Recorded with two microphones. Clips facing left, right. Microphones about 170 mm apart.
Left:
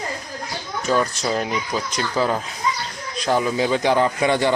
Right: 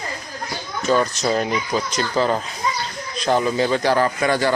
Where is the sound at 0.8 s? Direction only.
5° left (ahead or behind).